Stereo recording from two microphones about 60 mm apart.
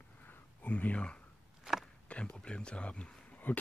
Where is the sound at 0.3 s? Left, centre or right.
Left.